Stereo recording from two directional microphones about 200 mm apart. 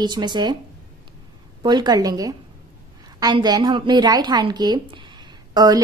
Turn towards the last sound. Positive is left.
turn(degrees=-20)  # may be behind; listen again after turning